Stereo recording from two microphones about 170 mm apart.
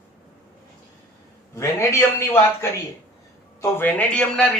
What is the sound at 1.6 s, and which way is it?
Speech, 15° left (ahead or behind).